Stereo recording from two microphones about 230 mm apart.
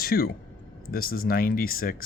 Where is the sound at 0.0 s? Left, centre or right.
Left.